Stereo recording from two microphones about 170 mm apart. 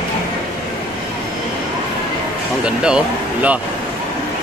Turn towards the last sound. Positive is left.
turn(degrees=-5)  # may be behind; listen again after turning